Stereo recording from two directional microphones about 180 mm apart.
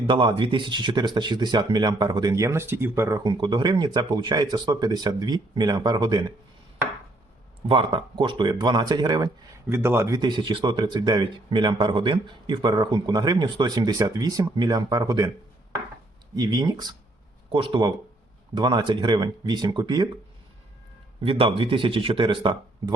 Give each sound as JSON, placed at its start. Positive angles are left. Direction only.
{"t": 0.1, "sound": "speech", "side_deg": -25}
{"t": 7.7, "sound": "speech", "side_deg": -30}
{"t": 16.3, "sound": "speech", "side_deg": -20}
{"t": 21.2, "sound": "speech", "side_deg": -30}